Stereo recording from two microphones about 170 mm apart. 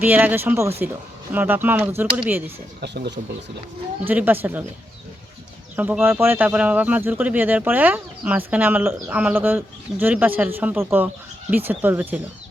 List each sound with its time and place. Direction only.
0.0 s speech: 10° right (ahead or behind)
2.8 s speech: 85° right
4.0 s speech: 10° right (ahead or behind)
5.7 s speech: 10° right (ahead or behind)